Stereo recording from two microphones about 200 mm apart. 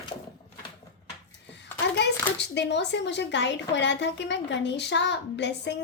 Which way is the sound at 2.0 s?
60° left (ahead or behind).